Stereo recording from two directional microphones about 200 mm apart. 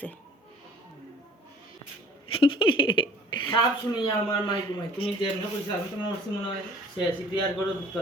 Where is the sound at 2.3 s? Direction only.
25° left (ahead or behind).